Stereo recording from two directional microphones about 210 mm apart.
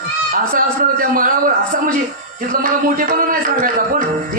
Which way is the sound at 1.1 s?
40° right (ahead or behind).